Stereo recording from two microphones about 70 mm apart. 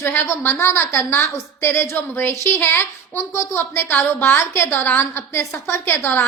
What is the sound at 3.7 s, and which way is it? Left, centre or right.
A woman's voice, left.